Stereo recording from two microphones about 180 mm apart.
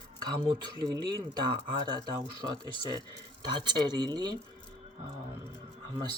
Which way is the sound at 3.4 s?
25° right (ahead or behind).